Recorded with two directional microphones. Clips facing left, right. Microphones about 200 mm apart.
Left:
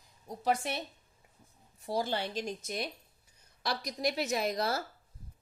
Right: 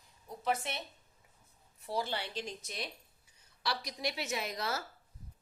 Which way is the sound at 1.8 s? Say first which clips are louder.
Left 4 dB; 40° left (ahead or behind).